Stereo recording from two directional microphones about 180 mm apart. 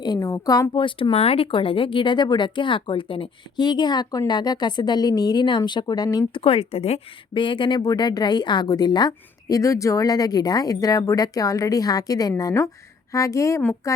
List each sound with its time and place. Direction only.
0.0 s a woman's voice: 20° left (ahead or behind)